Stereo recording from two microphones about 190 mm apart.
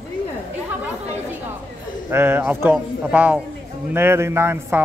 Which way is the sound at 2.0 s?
10° right (ahead or behind).